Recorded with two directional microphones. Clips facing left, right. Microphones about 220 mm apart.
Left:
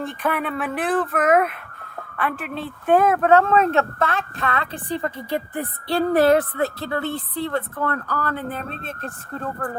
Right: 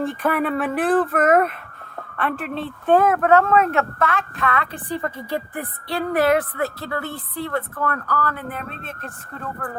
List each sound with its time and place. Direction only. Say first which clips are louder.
0.0 s speech: right 3 dB; 5° right (ahead or behind)
2.9 s speech: even; 15° left (ahead or behind); by 9.0 s 30° left (ahead or behind)